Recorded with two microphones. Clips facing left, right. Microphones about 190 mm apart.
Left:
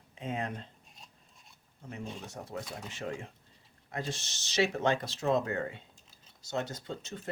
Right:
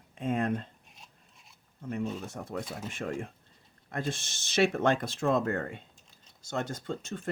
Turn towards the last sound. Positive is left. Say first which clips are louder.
# right 4 dB
turn(degrees=-50)  # may be behind; listen again after turning